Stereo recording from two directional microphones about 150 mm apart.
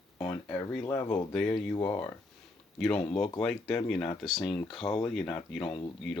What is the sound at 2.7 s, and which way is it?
Speech, 5° left (ahead or behind).